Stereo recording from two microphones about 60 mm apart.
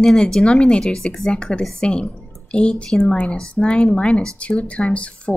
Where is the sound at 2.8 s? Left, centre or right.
Centre.